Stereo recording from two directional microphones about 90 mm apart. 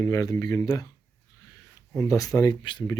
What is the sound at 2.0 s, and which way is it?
Speech, 40° left (ahead or behind).